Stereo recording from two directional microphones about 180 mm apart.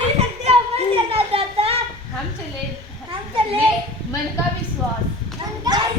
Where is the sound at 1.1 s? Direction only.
30° right (ahead or behind).